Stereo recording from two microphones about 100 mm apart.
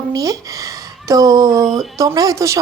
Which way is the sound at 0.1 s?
35° right (ahead or behind).